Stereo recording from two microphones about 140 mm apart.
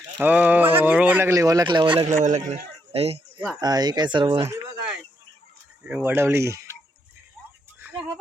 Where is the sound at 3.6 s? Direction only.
30° right (ahead or behind).